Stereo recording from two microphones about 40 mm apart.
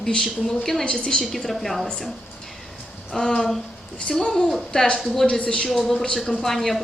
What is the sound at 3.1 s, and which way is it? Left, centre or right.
Speech, centre.